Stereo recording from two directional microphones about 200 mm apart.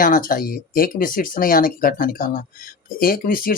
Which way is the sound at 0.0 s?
45° left (ahead or behind).